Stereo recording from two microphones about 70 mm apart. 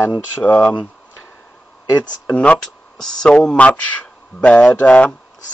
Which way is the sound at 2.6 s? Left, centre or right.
Centre.